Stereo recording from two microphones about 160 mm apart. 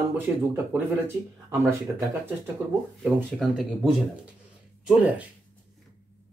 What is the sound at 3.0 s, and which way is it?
Speech, centre (ahead or behind).